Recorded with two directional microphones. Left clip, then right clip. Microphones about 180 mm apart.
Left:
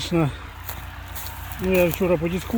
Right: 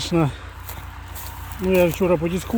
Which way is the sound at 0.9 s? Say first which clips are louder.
Left 1 dB; 40° left (ahead or behind).